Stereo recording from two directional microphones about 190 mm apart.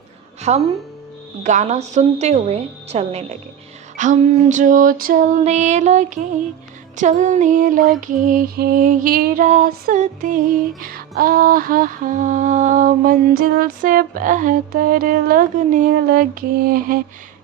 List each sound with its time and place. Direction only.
0.5 s female singing: 35° right (ahead or behind)
6.9 s music: 40° right (ahead or behind)